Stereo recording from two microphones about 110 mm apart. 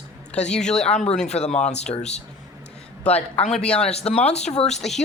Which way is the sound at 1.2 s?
85° left.